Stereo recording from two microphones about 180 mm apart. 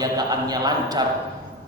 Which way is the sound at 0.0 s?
20° right (ahead or behind).